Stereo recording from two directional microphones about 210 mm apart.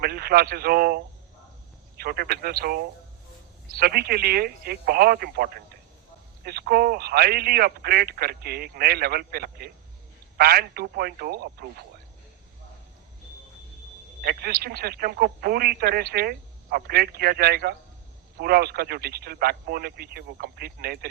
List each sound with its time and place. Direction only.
0.0 s speech: 45° right (ahead or behind)
14.2 s speech: 45° right (ahead or behind)